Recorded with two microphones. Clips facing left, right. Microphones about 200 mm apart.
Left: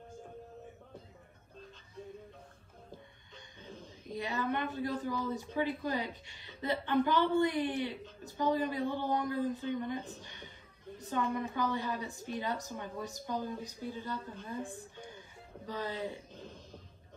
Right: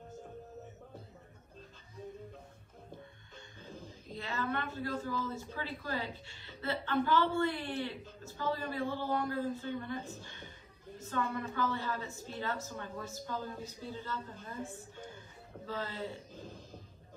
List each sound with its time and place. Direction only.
4.1 s a woman's voice: 15° left (ahead or behind)
15.6 s a woman's voice: 15° left (ahead or behind)